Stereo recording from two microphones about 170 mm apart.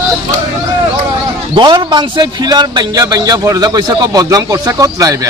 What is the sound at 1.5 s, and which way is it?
A man's voice, 30° right (ahead or behind).